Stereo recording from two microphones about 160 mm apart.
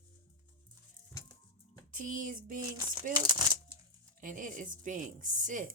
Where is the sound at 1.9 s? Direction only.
55° right (ahead or behind).